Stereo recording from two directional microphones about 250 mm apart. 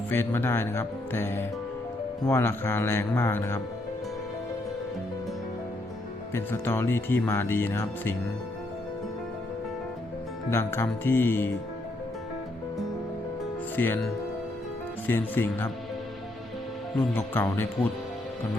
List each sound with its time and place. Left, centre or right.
0.1 s speech: centre
6.3 s speech: centre
10.5 s speech: centre
13.7 s speech: centre
17.0 s speech: centre